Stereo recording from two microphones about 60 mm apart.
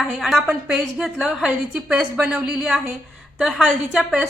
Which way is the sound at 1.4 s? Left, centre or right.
Right.